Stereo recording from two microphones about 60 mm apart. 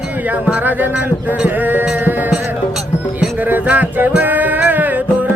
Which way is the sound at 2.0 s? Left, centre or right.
Right.